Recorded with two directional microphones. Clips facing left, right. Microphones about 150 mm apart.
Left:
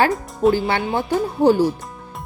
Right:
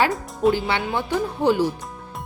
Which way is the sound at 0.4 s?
Centre (ahead or behind).